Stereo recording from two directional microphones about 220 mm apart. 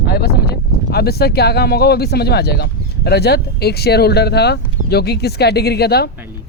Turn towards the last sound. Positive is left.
turn(degrees=45)  # may be behind; listen again after turning